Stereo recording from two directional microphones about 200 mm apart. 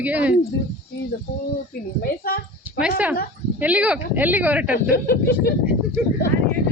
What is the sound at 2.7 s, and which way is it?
Speech, 5° right (ahead or behind).